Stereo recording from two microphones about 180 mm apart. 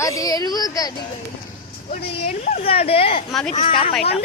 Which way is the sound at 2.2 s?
40° left (ahead or behind).